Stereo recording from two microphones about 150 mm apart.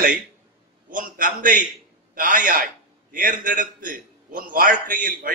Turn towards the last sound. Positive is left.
turn(degrees=-65)  # may be behind; listen again after turning